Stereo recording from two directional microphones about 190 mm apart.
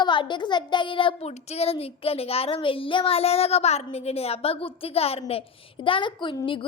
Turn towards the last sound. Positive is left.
turn(degrees=25)  # may be behind; listen again after turning